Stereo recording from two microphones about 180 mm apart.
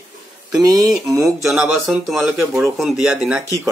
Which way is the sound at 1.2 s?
Centre (ahead or behind).